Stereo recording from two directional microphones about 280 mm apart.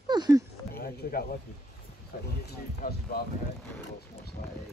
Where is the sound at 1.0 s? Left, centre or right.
Left.